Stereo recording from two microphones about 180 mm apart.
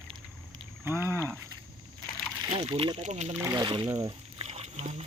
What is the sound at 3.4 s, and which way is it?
Speech, 20° right (ahead or behind).